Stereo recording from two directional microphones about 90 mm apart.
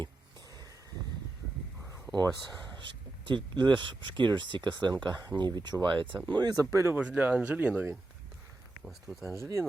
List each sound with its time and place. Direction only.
1.8 s a sound: 30° right (ahead or behind)
2.7 s speech: 60° right (ahead or behind)
6.2 s speech: 50° right (ahead or behind)
6.6 s speech: 35° right (ahead or behind)
6.9 s speech: 15° right (ahead or behind)
8.8 s speech: 5° right (ahead or behind)
9.3 s speech: 30° right (ahead or behind)